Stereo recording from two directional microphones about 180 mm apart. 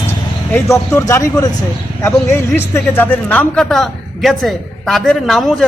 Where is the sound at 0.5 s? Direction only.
15° left (ahead or behind).